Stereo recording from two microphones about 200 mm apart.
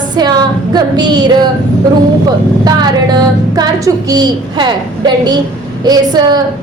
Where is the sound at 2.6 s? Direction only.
20° right (ahead or behind).